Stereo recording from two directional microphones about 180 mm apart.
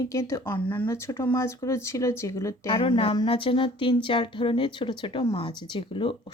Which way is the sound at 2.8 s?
30° left (ahead or behind).